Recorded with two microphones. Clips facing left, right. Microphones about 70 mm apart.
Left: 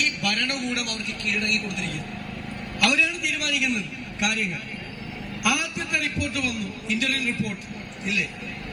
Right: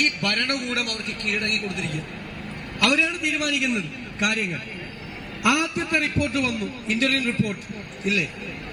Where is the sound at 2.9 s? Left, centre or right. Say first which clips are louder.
Right 2 dB; right.